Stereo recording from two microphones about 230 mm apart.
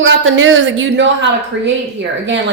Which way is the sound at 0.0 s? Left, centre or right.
Right.